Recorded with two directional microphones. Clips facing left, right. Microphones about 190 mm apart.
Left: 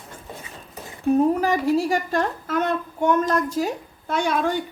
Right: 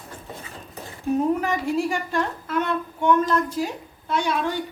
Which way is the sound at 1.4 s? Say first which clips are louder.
Left 3 dB; 35° left (ahead or behind).